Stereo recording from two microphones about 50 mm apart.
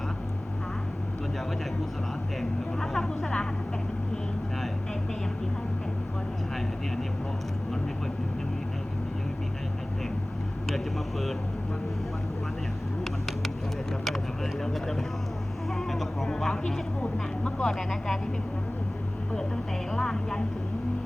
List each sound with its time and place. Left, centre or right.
2.4 s speech: centre
10.7 s speech: centre
14.6 s speech: centre
17.0 s speech: left
17.7 s speech: centre
19.9 s speech: centre